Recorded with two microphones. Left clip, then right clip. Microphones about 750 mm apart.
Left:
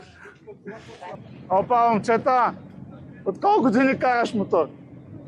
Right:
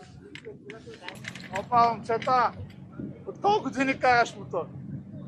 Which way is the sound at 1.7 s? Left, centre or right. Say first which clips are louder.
Left 1 dB; left.